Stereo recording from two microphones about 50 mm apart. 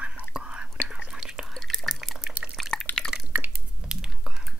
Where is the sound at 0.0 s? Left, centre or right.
Right.